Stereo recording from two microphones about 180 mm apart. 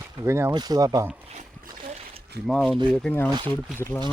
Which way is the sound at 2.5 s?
Centre (ahead or behind).